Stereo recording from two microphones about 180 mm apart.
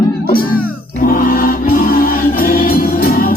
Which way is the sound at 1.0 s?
50° left (ahead or behind).